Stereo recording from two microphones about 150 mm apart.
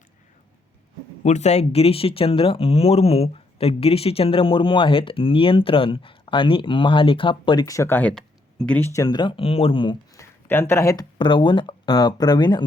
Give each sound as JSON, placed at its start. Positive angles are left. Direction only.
{"t": 1.2, "sound": "speech", "side_deg": 50}
{"t": 8.9, "sound": "speech", "side_deg": 25}
{"t": 10.2, "sound": "speech", "side_deg": 15}